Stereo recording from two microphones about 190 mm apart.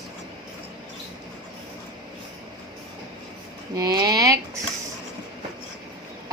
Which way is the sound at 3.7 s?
20° right (ahead or behind).